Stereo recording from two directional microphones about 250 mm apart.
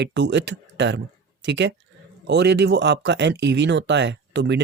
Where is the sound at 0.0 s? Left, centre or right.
Right.